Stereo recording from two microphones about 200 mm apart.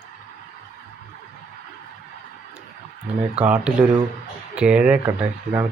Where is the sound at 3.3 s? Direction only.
5° right (ahead or behind).